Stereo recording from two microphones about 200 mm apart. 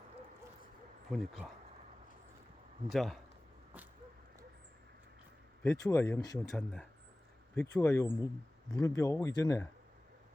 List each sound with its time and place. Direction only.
1.1 s speech: centre (ahead or behind)
2.9 s speech: centre (ahead or behind)
5.6 s speech: 15° left (ahead or behind)
6.5 s speech: 5° left (ahead or behind)
7.5 s speech: 15° left (ahead or behind)